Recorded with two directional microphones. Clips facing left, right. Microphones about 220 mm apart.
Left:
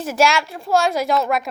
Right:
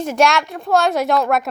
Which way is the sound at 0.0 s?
5° left (ahead or behind).